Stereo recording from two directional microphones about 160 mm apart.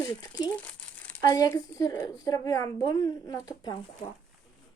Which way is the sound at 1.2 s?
25° left (ahead or behind).